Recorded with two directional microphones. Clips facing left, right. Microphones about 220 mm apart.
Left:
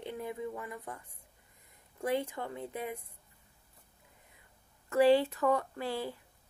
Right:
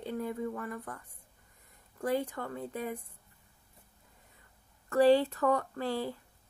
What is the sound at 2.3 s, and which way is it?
Speech, 20° left (ahead or behind).